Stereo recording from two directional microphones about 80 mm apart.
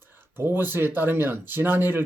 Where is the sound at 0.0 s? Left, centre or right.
Right.